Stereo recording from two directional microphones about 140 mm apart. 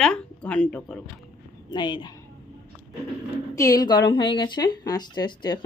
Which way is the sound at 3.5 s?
25° left (ahead or behind).